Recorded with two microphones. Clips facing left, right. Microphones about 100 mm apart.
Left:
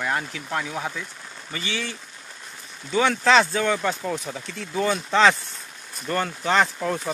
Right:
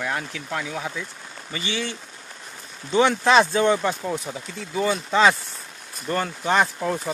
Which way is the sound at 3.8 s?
10° right (ahead or behind).